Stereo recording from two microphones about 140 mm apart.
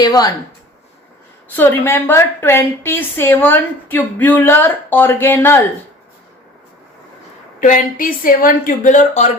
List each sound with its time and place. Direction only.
0.0 s a woman's voice: 25° left (ahead or behind)
1.5 s a woman's voice: 15° left (ahead or behind)
7.6 s speech: 75° left (ahead or behind)